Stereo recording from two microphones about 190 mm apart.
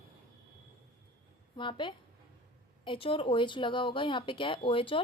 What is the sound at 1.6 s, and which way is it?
A woman's voice, 25° left (ahead or behind).